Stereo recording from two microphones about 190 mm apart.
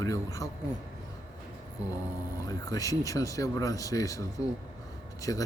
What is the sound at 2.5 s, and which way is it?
Speech, 20° left (ahead or behind).